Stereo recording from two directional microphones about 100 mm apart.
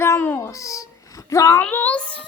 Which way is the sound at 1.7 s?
15° left (ahead or behind).